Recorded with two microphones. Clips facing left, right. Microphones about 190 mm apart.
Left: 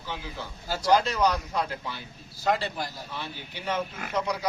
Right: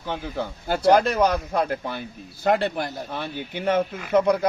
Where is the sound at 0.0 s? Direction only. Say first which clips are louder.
Right 8 dB; 55° right (ahead or behind).